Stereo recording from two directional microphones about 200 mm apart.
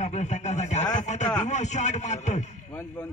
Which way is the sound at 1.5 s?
35° left (ahead or behind).